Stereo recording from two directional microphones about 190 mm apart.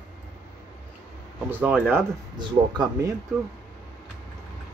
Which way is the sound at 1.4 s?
10° right (ahead or behind).